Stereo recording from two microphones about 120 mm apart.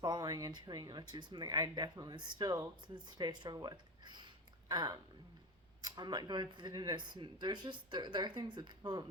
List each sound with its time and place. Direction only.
0.0 s speech: 35° right (ahead or behind)